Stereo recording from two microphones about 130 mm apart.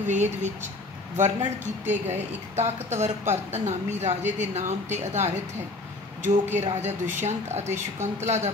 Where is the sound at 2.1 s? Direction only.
60° right (ahead or behind).